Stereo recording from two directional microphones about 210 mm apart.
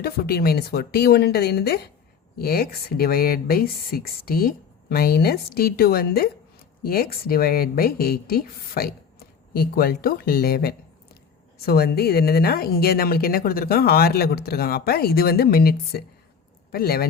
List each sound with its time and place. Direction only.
0.0 s speech: 45° left (ahead or behind)